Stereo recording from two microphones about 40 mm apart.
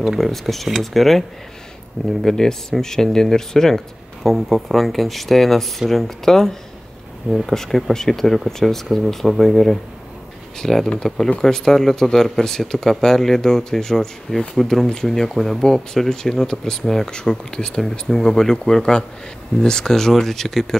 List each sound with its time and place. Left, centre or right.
0.2 s speech: centre
2.2 s speech: centre
4.2 s speech: centre
17.6 s speech: left